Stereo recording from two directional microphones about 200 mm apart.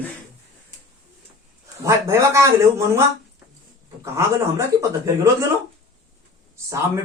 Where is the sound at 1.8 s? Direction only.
15° right (ahead or behind).